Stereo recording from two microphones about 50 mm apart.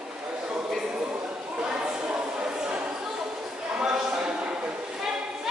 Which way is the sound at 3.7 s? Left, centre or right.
Centre.